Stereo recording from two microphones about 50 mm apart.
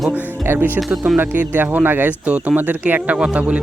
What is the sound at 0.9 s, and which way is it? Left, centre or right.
Speech, centre.